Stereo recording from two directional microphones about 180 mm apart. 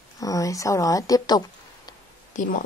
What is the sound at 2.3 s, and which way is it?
Speech, 45° left (ahead or behind).